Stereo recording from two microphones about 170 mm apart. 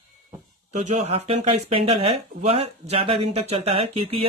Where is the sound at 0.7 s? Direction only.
45° right (ahead or behind).